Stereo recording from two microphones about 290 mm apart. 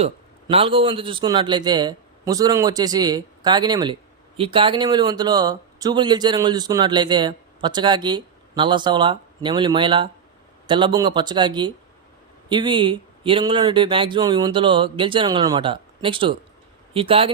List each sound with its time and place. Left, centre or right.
0.0 s speech: centre